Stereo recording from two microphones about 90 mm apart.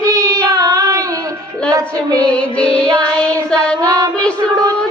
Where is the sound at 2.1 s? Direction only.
15° left (ahead or behind).